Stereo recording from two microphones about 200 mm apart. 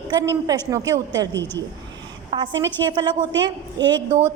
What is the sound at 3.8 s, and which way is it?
Speech, 60° right (ahead or behind).